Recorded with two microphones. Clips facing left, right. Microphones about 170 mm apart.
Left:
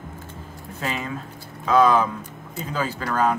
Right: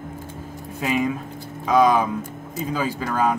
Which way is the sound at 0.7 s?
15° right (ahead or behind).